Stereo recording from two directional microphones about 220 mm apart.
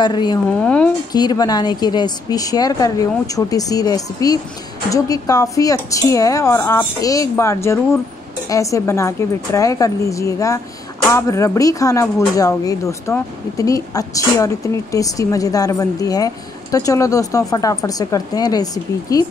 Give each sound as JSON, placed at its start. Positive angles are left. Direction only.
{"t": 0.0, "sound": "a woman's voice", "side_deg": 20}